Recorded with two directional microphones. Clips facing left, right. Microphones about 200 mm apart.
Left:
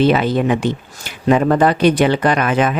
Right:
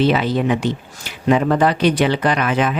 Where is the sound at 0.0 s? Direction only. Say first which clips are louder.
Left 2 dB; 50° left (ahead or behind).